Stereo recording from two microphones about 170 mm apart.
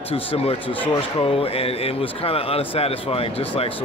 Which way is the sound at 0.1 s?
35° left (ahead or behind).